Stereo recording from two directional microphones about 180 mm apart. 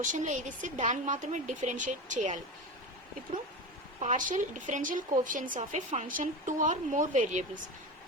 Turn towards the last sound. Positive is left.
turn(degrees=-45)  # may be behind; listen again after turning